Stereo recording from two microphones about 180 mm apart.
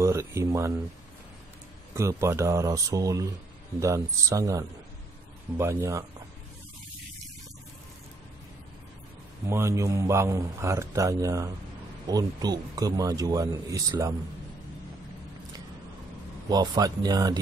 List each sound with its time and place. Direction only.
0.0 s speech: 15° right (ahead or behind)
2.0 s speech: 15° right (ahead or behind)
9.5 s a man's voice: 15° right (ahead or behind)
16.4 s a man's voice: 20° right (ahead or behind)